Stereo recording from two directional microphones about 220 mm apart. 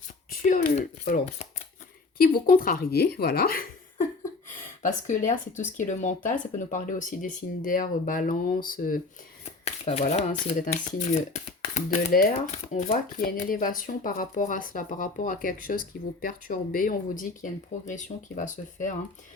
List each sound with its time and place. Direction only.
0.3 s speech: 40° left (ahead or behind)
4.8 s speech: 35° left (ahead or behind)
9.6 s speech: 30° left (ahead or behind)